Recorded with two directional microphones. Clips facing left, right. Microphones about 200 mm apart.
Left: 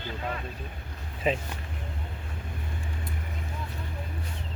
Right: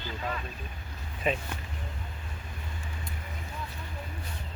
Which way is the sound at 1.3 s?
25° left (ahead or behind).